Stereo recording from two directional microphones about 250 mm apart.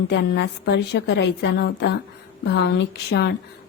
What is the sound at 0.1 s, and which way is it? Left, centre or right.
A woman's voice, left.